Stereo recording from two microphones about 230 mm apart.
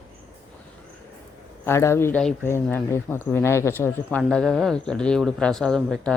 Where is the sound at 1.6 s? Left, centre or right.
Centre.